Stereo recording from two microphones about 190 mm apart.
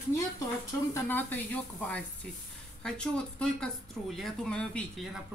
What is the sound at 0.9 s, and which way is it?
Speech, 10° left (ahead or behind).